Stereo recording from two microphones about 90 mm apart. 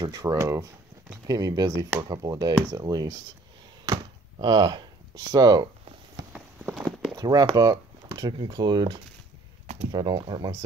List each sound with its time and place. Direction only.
0.0 s speech: 40° right (ahead or behind)
3.9 s speech: 55° right (ahead or behind)
7.2 s speech: 50° right (ahead or behind)